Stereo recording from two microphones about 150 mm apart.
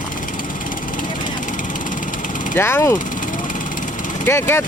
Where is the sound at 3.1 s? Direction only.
65° left (ahead or behind).